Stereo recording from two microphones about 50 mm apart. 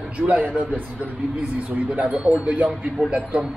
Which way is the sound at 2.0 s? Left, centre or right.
Right.